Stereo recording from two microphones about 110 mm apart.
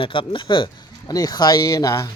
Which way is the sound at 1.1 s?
35° left (ahead or behind).